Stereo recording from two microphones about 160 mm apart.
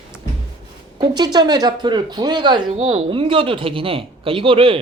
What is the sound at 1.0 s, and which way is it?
Speech, 25° right (ahead or behind).